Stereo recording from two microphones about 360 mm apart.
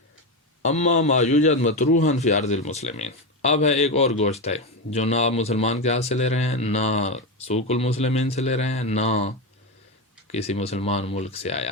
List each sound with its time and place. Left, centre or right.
0.6 s a man's voice: centre
10.3 s a man's voice: centre